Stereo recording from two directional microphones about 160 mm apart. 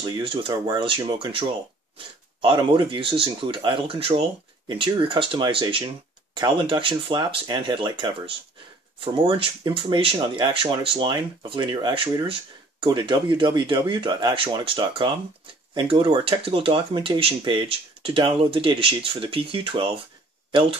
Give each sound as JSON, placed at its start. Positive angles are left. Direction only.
{"t": 0.0, "sound": "speech", "side_deg": -30}
{"t": 2.4, "sound": "speech", "side_deg": -30}